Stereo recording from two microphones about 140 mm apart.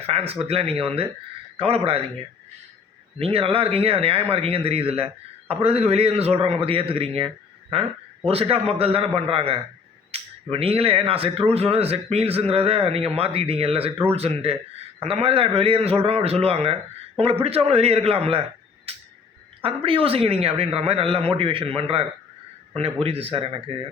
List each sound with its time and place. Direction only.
0.1 s speech: 45° right (ahead or behind)
3.2 s speech: 45° right (ahead or behind)
18.9 s a sound: 45° right (ahead or behind)
19.6 s a man's voice: 40° right (ahead or behind)